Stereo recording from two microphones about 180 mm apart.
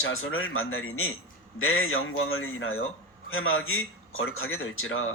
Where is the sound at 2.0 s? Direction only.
90° left.